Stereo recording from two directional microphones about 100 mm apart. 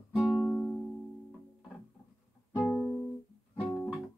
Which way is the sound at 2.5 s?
10° left (ahead or behind).